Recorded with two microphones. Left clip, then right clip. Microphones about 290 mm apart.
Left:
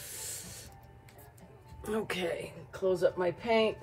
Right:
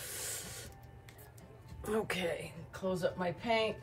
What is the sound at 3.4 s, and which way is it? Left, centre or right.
Speech, centre.